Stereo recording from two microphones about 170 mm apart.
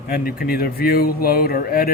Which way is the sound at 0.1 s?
60° left (ahead or behind).